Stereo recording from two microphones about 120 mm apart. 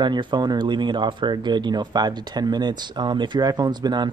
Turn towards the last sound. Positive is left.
turn(degrees=-35)  # may be behind; listen again after turning